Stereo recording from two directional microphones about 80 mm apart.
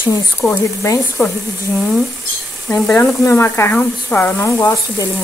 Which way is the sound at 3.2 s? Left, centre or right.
Left.